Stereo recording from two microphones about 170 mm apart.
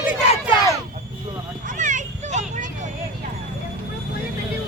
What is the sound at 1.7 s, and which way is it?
Children playing, 45° right (ahead or behind).